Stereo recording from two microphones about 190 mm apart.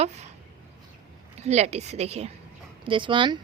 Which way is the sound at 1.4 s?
35° right (ahead or behind).